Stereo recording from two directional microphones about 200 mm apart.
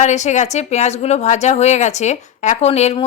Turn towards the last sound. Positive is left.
turn(degrees=30)  # may be behind; listen again after turning